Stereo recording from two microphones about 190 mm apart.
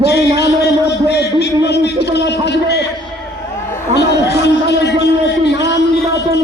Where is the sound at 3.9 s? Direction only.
60° left (ahead or behind).